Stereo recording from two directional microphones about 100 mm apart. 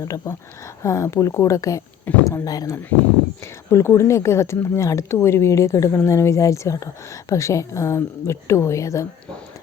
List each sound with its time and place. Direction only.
0.0 s a woman's voice: 35° left (ahead or behind)
3.4 s a woman's voice: 25° left (ahead or behind)